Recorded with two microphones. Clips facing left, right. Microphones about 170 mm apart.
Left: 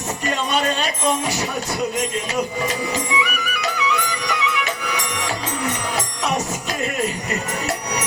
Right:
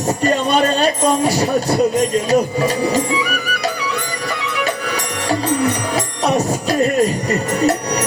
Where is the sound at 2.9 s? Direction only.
35° right (ahead or behind).